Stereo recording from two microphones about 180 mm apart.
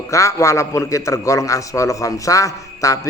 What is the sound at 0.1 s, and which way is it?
A man's voice, 15° left (ahead or behind).